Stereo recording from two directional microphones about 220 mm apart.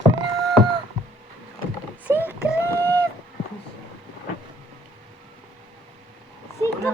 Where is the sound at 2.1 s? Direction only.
10° right (ahead or behind).